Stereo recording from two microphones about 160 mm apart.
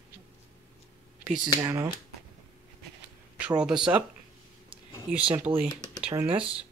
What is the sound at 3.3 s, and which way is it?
Speech, 5° right (ahead or behind).